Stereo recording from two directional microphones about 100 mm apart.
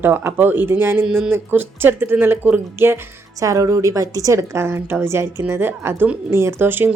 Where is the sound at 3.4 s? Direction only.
35° right (ahead or behind).